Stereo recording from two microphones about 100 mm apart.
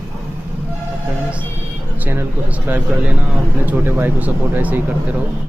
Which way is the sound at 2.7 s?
15° right (ahead or behind).